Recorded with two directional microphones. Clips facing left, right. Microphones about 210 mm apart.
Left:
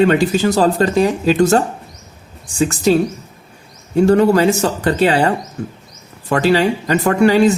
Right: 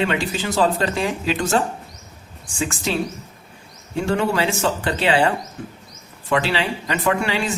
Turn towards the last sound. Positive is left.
turn(degrees=40)  # may be behind; listen again after turning